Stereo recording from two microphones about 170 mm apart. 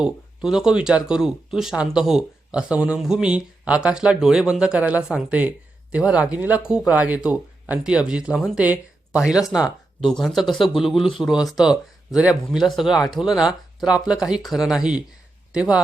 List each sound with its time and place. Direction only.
0.0 s speech: 5° right (ahead or behind)